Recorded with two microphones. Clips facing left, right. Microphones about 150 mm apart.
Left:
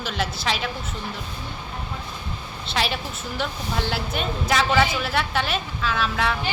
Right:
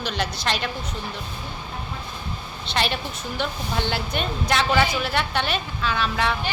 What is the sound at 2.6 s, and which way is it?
A woman's voice, centre (ahead or behind).